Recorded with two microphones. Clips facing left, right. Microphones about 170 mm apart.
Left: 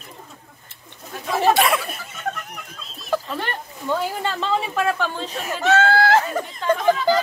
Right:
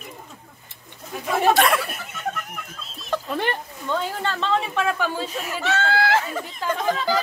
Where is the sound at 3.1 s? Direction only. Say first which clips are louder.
Even; 5° left (ahead or behind).